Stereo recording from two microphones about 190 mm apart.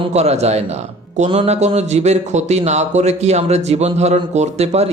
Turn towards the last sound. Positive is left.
turn(degrees=-35)  # may be behind; listen again after turning